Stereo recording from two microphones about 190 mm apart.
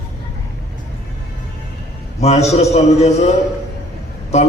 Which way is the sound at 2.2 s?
35° left (ahead or behind).